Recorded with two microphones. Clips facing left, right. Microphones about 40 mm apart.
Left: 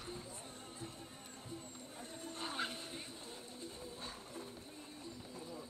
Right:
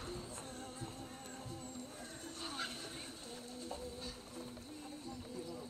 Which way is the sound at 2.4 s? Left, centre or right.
Left.